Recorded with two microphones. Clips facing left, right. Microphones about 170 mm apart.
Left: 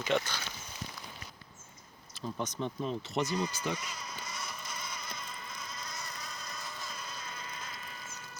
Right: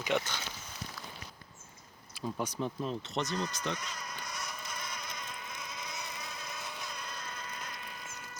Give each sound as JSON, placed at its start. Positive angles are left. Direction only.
{"t": 0.0, "sound": "speech", "side_deg": -15}
{"t": 2.2, "sound": "sheep", "side_deg": -10}